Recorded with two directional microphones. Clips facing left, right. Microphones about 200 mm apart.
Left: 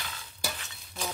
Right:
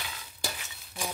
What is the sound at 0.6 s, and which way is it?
Stir, 15° right (ahead or behind).